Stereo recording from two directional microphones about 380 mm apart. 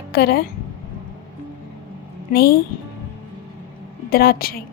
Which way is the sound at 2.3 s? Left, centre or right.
Left.